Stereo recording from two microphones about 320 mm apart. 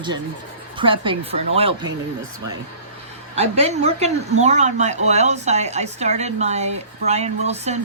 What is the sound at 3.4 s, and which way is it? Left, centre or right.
A woman's voice, centre.